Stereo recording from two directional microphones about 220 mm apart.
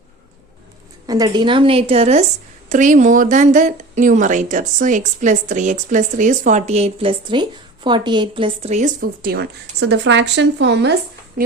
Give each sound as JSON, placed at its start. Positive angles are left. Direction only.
{"t": 1.0, "sound": "a woman's voice", "side_deg": -15}